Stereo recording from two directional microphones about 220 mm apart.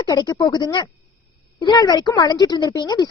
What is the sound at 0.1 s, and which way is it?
A woman's voice, 20° left (ahead or behind).